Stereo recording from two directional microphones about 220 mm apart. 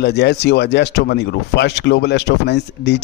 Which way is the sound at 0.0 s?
50° left (ahead or behind).